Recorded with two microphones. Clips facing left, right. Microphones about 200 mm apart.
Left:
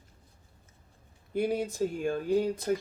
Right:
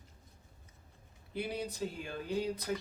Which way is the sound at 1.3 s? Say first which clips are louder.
Left 9 dB; 50° left (ahead or behind).